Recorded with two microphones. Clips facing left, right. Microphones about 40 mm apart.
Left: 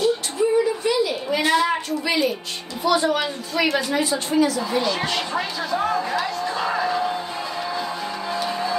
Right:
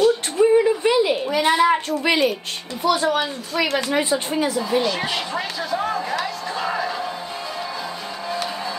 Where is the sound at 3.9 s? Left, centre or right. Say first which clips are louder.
Right 1 dB; right.